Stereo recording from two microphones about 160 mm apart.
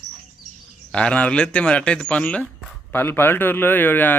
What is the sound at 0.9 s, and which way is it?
Speech, 5° left (ahead or behind).